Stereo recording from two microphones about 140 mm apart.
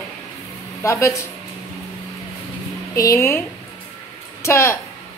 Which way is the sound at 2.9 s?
20° left (ahead or behind).